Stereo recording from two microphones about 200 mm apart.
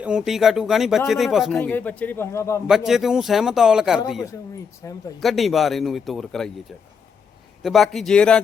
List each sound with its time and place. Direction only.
0.0 s a man's voice: 5° right (ahead or behind); by 2.6 s 15° left (ahead or behind)
2.6 s a man's voice: centre (ahead or behind)
4.8 s speech: 15° left (ahead or behind)
5.2 s a man's voice: centre (ahead or behind)
7.6 s a man's voice: centre (ahead or behind)